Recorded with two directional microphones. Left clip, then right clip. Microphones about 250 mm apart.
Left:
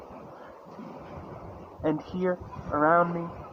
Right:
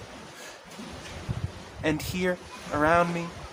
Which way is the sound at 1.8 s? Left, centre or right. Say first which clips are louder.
Right 1 dB; right.